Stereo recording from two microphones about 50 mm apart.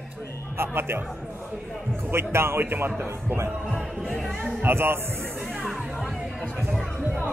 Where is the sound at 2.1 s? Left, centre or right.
Right.